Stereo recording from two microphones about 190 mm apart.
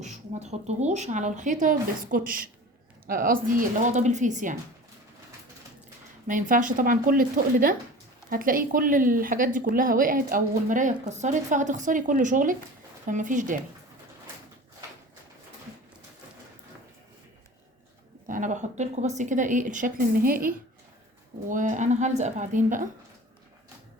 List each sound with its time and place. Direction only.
0.0 s speech: 35° right (ahead or behind)
6.2 s a woman's voice: 45° right (ahead or behind)
18.3 s a woman's voice: 45° right (ahead or behind)
21.5 s speech: 40° right (ahead or behind)